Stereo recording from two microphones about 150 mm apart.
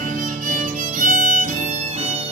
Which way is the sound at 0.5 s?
55° right (ahead or behind).